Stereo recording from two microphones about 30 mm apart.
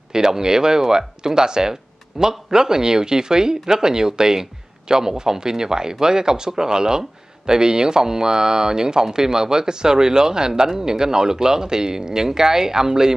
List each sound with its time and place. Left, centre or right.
0.1 s speech: right